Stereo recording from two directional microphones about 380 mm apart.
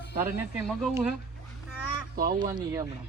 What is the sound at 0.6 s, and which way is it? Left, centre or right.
Speech, centre.